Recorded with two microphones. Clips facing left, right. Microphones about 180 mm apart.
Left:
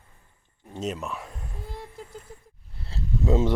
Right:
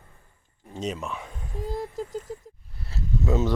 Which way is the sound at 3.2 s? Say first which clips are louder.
Left 2 dB; 25° left (ahead or behind).